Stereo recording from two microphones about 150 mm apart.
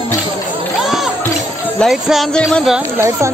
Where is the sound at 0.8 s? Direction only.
Centre (ahead or behind).